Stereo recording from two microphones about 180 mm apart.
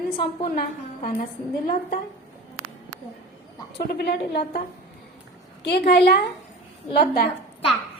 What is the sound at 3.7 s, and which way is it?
Speech, 60° left (ahead or behind).